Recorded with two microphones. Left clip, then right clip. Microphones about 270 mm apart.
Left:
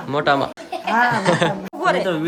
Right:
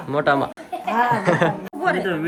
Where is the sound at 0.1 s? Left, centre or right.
Centre.